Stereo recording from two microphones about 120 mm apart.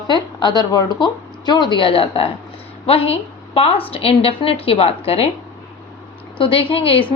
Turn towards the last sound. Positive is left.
turn(degrees=50)  # may be behind; listen again after turning